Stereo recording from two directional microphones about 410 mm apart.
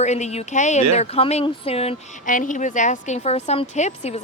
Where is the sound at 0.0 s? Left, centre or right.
Centre.